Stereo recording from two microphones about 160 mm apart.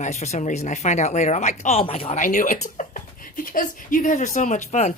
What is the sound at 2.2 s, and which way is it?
Speech, 55° left (ahead or behind).